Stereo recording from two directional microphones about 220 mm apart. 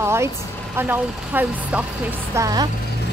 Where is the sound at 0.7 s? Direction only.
10° right (ahead or behind).